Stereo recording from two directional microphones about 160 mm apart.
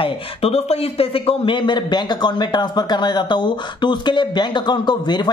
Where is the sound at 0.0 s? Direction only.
40° left (ahead or behind).